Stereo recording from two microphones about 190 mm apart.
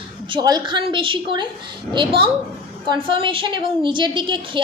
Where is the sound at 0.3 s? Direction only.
20° right (ahead or behind).